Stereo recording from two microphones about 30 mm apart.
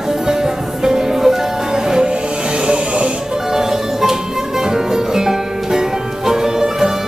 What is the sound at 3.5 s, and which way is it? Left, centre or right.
Music, centre.